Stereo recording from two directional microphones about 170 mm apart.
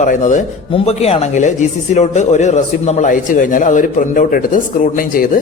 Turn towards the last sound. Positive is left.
turn(degrees=55)  # may be behind; listen again after turning